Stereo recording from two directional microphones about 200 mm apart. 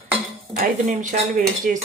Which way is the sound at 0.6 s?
40° right (ahead or behind).